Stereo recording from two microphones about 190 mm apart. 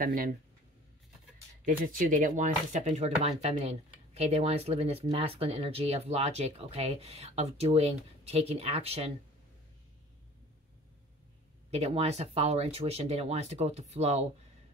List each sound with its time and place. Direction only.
0.0 s speech: 50° right (ahead or behind)
1.7 s speech: 45° right (ahead or behind)
11.7 s speech: 30° right (ahead or behind)